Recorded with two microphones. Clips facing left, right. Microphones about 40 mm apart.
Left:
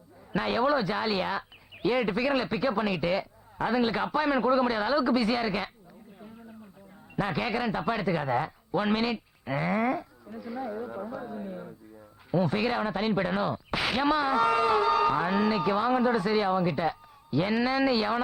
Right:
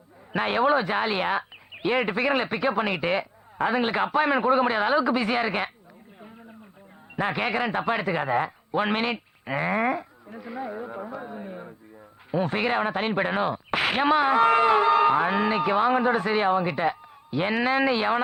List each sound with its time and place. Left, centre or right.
0.3 s speech: right
7.2 s radio: right
12.3 s speech: right